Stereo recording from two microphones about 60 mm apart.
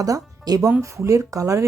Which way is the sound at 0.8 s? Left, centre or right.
Right.